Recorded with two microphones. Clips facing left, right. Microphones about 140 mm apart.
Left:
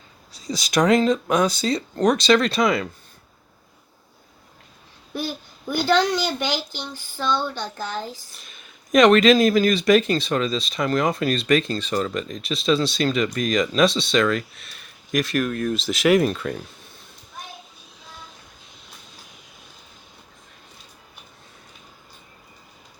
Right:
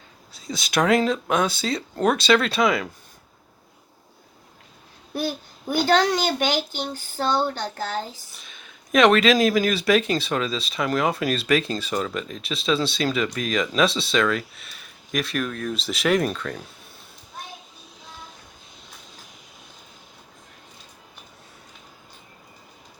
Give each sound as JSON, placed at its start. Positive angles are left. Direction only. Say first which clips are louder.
{"t": 0.3, "sound": "speech", "louder": "left 2 dB", "side_deg": 0}
{"t": 5.1, "sound": "speech", "louder": "right 2 dB", "side_deg": -50}
{"t": 8.4, "sound": "speech", "louder": "right 1 dB", "side_deg": 0}